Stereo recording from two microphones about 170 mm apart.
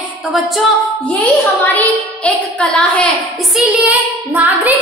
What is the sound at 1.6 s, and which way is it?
A woman's voice, 10° left (ahead or behind).